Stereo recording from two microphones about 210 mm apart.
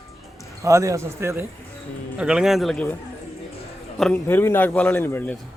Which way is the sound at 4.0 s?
10° left (ahead or behind).